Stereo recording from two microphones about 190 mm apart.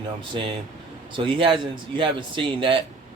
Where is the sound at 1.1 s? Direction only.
25° right (ahead or behind).